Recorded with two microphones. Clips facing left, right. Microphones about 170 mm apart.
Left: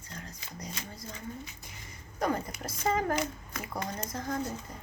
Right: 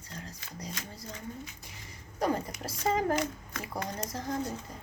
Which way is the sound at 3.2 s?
10° left (ahead or behind).